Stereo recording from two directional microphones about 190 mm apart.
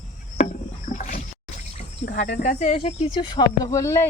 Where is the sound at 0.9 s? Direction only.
40° left (ahead or behind).